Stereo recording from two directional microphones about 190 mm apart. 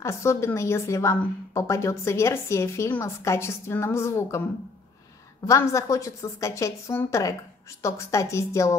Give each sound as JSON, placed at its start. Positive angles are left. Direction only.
{"t": 0.0, "sound": "a woman's voice", "side_deg": 15}
{"t": 5.5, "sound": "a woman's voice", "side_deg": 15}